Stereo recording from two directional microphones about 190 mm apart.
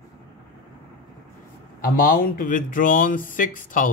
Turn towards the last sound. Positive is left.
turn(degrees=45)  # may be behind; listen again after turning